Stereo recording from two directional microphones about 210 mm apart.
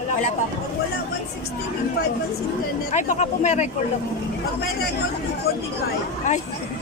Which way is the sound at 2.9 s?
35° left (ahead or behind).